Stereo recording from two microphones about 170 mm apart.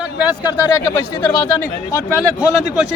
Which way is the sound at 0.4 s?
15° left (ahead or behind).